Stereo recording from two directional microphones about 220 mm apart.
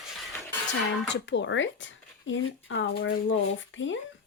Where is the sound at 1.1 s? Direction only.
55° left (ahead or behind).